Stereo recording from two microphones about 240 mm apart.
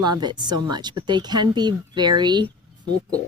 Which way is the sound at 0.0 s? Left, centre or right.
Centre.